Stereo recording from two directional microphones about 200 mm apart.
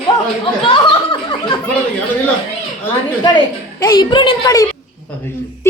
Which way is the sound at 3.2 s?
20° left (ahead or behind).